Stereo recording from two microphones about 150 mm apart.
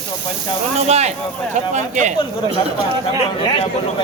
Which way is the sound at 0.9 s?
45° right (ahead or behind).